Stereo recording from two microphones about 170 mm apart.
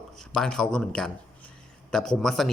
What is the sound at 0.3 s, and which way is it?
A man's voice, 5° left (ahead or behind).